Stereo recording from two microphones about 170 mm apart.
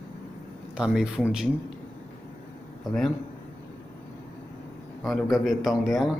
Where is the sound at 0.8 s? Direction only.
5° right (ahead or behind).